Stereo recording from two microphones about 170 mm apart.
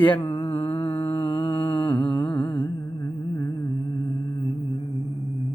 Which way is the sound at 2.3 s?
25° left (ahead or behind).